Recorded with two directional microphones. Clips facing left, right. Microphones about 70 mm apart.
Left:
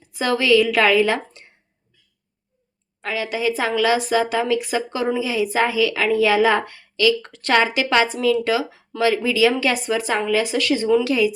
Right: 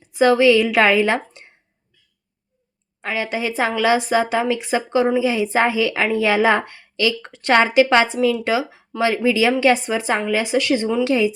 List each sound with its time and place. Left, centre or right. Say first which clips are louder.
0.0 s a woman's voice: right 7 dB; right
3.0 s speech: even; right